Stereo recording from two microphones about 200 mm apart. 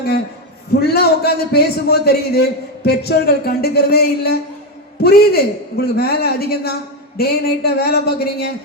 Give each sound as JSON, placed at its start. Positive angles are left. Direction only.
{"t": 0.7, "sound": "a man's voice", "side_deg": 50}